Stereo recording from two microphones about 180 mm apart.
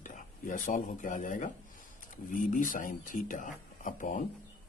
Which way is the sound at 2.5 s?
45° left (ahead or behind).